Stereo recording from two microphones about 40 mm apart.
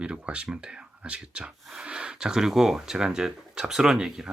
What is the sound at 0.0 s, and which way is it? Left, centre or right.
Speech, right.